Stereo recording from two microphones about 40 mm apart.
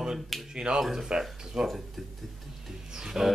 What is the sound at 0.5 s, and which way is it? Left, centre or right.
Speech, centre.